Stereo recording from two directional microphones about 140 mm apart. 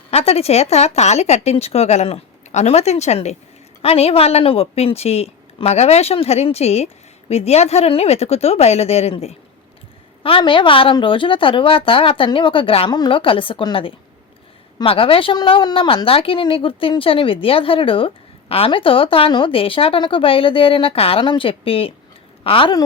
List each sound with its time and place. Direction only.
0.1 s a woman's voice: 45° left (ahead or behind)